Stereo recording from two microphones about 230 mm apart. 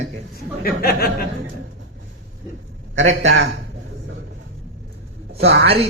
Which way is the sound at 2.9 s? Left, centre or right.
Right.